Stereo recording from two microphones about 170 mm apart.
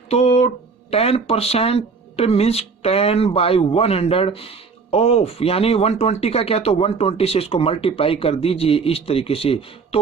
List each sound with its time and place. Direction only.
0.1 s speech: 40° left (ahead or behind)